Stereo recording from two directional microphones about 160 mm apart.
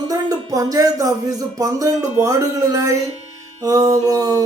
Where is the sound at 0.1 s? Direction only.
25° right (ahead or behind).